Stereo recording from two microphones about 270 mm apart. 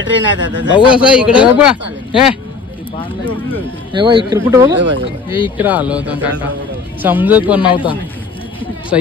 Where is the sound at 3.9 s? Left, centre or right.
Centre.